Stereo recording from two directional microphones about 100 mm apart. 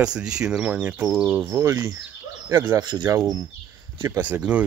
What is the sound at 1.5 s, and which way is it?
Speech, 35° right (ahead or behind).